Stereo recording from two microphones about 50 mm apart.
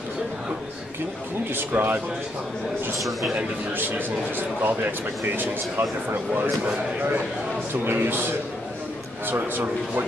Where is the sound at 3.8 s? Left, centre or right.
Right.